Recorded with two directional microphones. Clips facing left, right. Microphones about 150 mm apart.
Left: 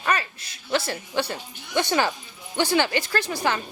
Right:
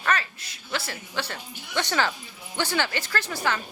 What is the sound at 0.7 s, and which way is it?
Speech, 20° left (ahead or behind).